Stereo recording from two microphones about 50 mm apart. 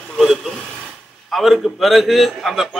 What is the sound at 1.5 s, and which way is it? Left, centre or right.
A man's voice, centre.